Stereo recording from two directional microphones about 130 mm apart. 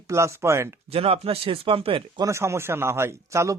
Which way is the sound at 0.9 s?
50° right (ahead or behind).